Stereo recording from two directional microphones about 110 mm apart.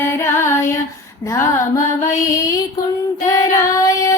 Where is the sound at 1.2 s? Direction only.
25° left (ahead or behind).